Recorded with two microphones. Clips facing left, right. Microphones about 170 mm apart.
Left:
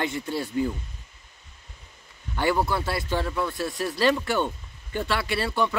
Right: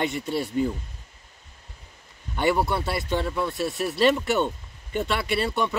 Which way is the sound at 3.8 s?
20° right (ahead or behind).